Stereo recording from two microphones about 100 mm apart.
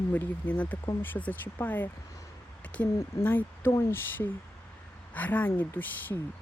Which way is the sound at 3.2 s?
20° left (ahead or behind).